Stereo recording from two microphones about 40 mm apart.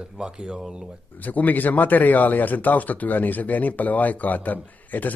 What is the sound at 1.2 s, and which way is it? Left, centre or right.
A man's voice, left.